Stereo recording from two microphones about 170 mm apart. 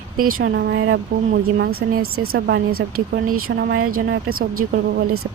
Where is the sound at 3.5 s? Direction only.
80° right.